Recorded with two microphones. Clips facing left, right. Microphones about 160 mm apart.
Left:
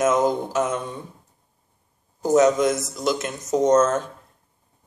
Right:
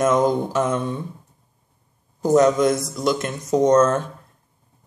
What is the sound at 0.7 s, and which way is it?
Speech, 55° right (ahead or behind).